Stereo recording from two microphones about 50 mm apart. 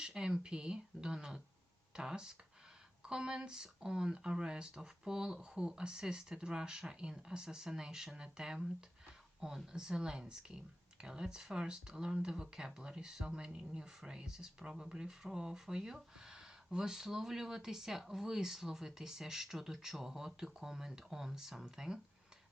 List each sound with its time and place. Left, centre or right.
0.0 s speech: centre